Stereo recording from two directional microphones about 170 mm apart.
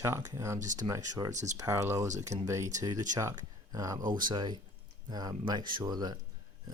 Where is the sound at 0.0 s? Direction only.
15° right (ahead or behind).